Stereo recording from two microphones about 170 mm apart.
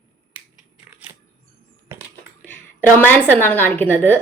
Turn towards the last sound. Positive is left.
turn(degrees=10)  # may be behind; listen again after turning